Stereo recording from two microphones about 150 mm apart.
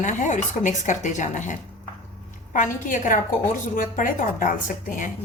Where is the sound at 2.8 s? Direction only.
60° left (ahead or behind).